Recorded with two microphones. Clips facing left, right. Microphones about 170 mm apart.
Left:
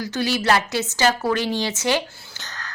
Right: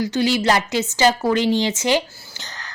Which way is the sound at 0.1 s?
15° right (ahead or behind).